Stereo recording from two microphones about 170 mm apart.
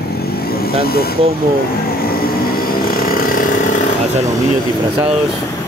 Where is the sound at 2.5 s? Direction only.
60° left (ahead or behind).